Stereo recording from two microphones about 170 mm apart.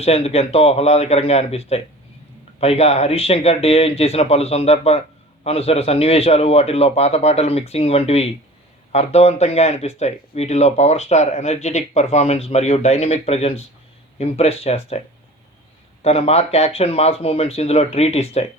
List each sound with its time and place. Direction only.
0.0 s speech: 35° left (ahead or behind)
16.0 s speech: 35° left (ahead or behind)